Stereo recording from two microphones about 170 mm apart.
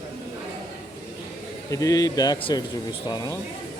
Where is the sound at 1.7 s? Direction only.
20° left (ahead or behind).